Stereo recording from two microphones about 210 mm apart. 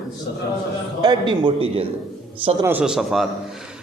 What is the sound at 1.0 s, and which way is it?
A man's voice, 20° right (ahead or behind).